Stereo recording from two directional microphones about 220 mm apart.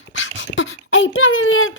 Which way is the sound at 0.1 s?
60° left (ahead or behind).